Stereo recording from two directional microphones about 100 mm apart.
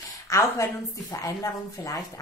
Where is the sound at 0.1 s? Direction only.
30° left (ahead or behind).